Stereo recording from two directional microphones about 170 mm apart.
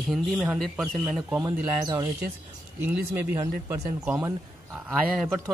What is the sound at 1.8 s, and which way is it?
Speech, 25° right (ahead or behind).